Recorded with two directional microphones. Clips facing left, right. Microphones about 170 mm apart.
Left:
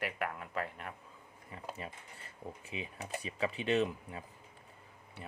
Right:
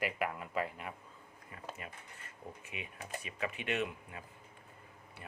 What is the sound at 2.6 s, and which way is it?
Speech, 30° left (ahead or behind).